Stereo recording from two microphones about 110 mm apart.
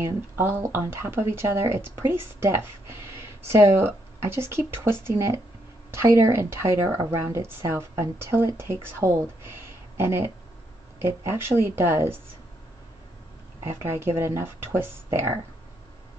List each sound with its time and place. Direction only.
0.0 s speech: 20° right (ahead or behind)
13.8 s speech: 20° right (ahead or behind)